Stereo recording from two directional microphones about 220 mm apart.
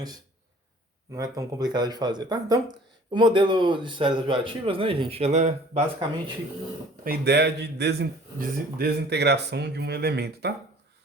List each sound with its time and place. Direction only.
1.1 s a man's voice: 15° right (ahead or behind); by 5.8 s 30° right (ahead or behind)
7.0 s speech: 45° right (ahead or behind)